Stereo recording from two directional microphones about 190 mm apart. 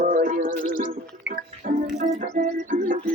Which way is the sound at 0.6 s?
45° left (ahead or behind).